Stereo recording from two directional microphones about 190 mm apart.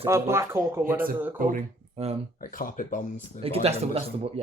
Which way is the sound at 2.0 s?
35° right (ahead or behind).